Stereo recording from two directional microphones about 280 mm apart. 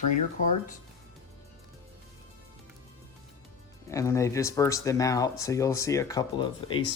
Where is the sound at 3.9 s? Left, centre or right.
Centre.